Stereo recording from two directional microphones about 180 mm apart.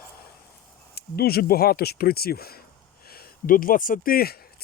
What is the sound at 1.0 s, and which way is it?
Speech, 60° left (ahead or behind).